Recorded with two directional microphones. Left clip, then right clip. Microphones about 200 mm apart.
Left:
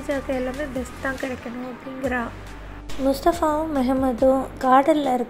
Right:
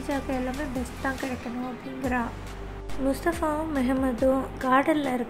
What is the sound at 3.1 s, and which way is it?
A woman's voice, 20° left (ahead or behind).